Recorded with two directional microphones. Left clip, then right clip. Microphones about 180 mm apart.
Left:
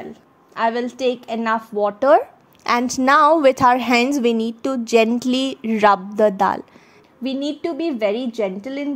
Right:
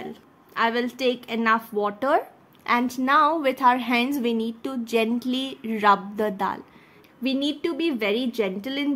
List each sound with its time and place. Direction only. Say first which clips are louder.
0.6 s a woman's voice: left 3 dB; 20° left (ahead or behind)
7.2 s speech: left 2 dB; 20° left (ahead or behind)